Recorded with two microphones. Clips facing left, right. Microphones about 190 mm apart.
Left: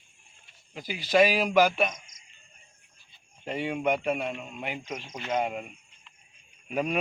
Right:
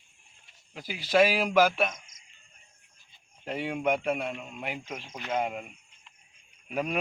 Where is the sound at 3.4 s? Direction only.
5° right (ahead or behind).